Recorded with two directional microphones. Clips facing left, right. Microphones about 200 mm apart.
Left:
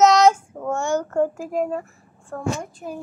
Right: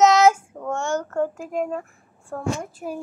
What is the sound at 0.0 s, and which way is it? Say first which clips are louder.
Child singing: left 1 dB; 5° right (ahead or behind).